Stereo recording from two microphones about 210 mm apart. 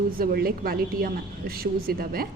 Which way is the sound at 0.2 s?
45° right (ahead or behind).